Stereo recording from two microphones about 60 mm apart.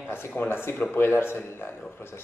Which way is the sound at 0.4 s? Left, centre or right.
Left.